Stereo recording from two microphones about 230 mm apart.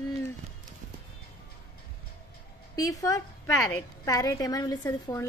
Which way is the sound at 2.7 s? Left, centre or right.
Centre.